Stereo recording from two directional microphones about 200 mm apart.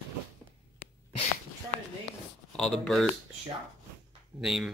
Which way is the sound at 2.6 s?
Centre (ahead or behind).